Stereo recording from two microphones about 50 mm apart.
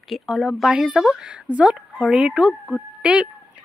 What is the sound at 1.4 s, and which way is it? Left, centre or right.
Speech, right.